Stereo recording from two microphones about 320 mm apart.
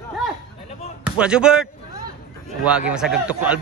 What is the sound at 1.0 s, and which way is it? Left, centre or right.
Speech, centre.